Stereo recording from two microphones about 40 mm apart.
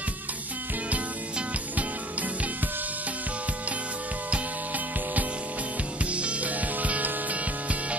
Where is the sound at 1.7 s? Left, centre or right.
Right.